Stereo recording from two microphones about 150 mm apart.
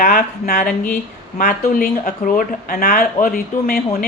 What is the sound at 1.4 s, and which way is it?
Speech, 75° left (ahead or behind).